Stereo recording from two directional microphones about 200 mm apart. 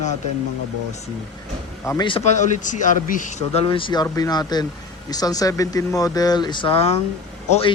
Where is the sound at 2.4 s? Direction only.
40° left (ahead or behind).